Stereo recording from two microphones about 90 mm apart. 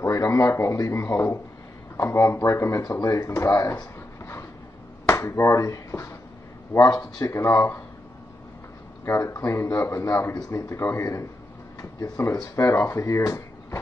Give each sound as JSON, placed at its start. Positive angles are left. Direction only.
{"t": 0.0, "sound": "speech", "side_deg": 35}
{"t": 4.2, "sound": "vehicle", "side_deg": 30}
{"t": 5.0, "sound": "speech", "side_deg": 30}
{"t": 9.0, "sound": "speech", "side_deg": 35}